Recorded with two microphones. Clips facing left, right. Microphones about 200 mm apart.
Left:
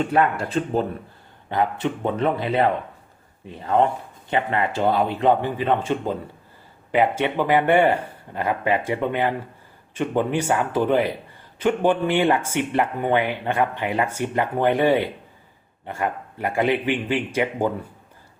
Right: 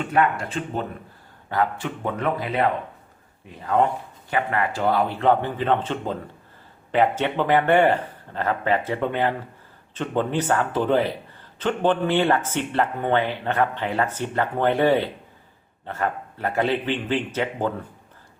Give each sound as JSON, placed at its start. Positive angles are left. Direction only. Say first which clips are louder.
{"t": 0.0, "sound": "speech", "louder": "left 2 dB", "side_deg": 35}
{"t": 1.5, "sound": "speech", "louder": "left 2 dB", "side_deg": 20}